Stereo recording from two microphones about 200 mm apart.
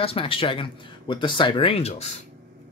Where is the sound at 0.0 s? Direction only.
25° left (ahead or behind).